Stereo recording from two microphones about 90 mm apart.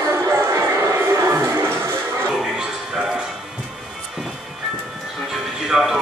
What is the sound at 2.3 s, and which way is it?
Music, 5° right (ahead or behind).